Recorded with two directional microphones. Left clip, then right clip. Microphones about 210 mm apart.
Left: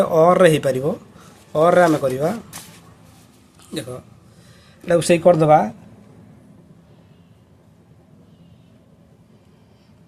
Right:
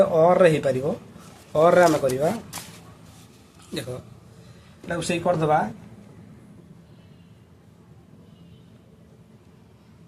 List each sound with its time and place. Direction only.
0.0 s speech: 25° left (ahead or behind)
3.7 s a man's voice: 15° left (ahead or behind)
4.9 s speech: 50° left (ahead or behind)